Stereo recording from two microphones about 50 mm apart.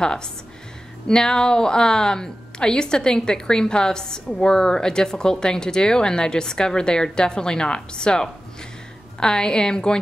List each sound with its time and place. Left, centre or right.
0.0 s a woman's voice: centre